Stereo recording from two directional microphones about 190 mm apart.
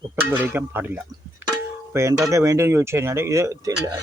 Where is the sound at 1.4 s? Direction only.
10° right (ahead or behind).